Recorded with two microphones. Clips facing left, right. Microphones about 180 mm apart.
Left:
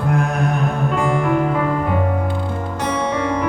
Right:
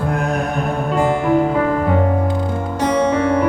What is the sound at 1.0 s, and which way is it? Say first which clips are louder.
Music: right 4 dB; 35° right (ahead or behind).